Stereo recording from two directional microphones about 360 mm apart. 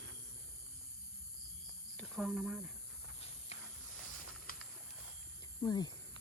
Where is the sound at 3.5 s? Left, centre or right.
Centre.